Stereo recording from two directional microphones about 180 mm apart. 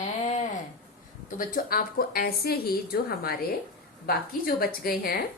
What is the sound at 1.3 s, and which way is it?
A woman's voice, 50° left (ahead or behind).